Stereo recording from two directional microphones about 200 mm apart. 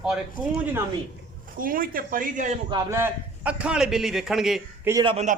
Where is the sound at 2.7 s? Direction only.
15° right (ahead or behind).